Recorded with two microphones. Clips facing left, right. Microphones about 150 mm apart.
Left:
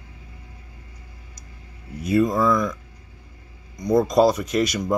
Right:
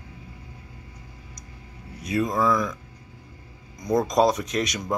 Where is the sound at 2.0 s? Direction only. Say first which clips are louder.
Left 4 dB; centre (ahead or behind).